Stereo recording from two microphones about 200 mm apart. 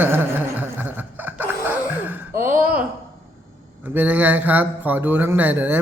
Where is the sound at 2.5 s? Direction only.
45° right (ahead or behind).